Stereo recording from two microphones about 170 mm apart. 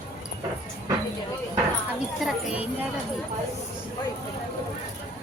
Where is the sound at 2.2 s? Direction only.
5° right (ahead or behind).